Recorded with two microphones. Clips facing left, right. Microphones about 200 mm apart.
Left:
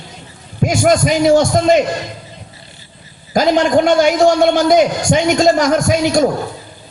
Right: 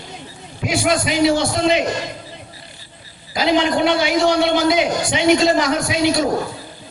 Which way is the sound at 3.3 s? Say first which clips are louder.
Left 5 dB; 45° left (ahead or behind).